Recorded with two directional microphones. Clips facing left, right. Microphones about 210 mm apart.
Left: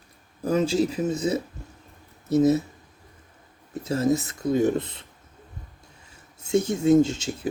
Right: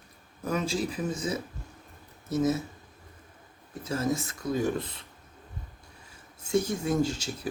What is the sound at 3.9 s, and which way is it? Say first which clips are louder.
Speech: left 6 dB; 25° left (ahead or behind).